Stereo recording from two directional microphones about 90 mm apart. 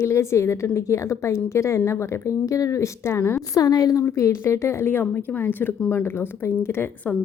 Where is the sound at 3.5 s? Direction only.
45° left (ahead or behind).